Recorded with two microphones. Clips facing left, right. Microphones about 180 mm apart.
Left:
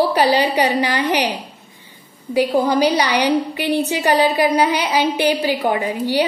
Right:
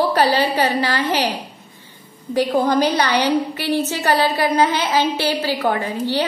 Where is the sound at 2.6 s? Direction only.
10° left (ahead or behind).